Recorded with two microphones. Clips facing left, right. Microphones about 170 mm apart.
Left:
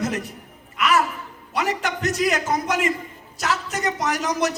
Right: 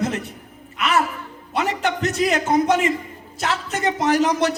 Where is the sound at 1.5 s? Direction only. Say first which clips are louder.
Right 2 dB; 25° right (ahead or behind).